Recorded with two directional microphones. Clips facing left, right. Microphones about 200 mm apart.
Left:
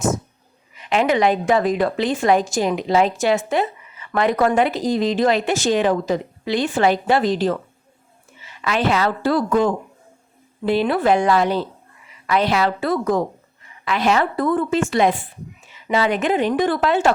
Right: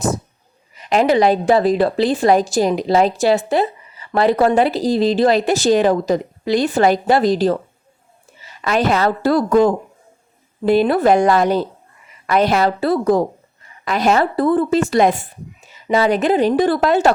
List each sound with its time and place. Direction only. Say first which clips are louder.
0.8 s speech: right 3 dB; 40° right (ahead or behind)